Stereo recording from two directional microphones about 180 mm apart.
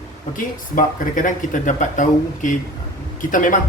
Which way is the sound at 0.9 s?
45° left (ahead or behind).